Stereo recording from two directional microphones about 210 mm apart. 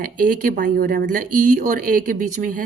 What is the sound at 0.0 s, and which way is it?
A woman's voice, 40° right (ahead or behind).